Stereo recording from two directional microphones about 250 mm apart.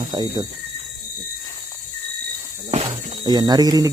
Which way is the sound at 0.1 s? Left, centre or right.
Centre.